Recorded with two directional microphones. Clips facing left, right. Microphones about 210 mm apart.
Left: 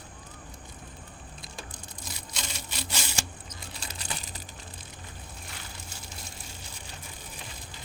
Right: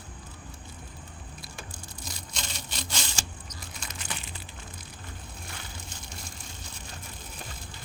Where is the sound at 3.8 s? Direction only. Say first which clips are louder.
Even; 35° left (ahead or behind).